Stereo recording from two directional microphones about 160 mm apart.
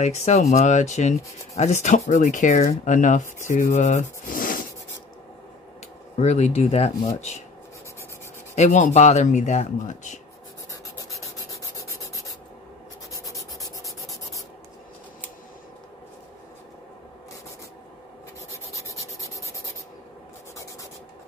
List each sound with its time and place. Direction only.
0.0 s speech: 45° left (ahead or behind)
6.1 s speech: 45° left (ahead or behind)
8.5 s speech: 50° left (ahead or behind)
13.1 s rub: 20° left (ahead or behind)
18.5 s rub: 20° left (ahead or behind)